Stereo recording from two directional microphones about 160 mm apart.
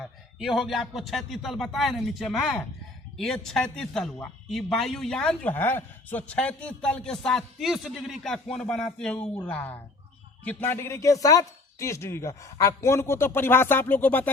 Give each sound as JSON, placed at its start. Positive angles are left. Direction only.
{"t": 0.0, "sound": "speech", "side_deg": 0}